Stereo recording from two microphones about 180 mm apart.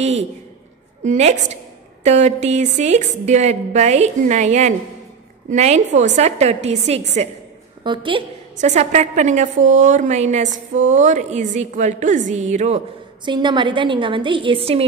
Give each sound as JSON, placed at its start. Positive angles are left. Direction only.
{"t": 0.0, "sound": "a woman's voice", "side_deg": -35}
{"t": 7.8, "sound": "a woman's voice", "side_deg": -25}
{"t": 8.5, "sound": "a woman's voice", "side_deg": -40}
{"t": 13.2, "sound": "a woman's voice", "side_deg": -25}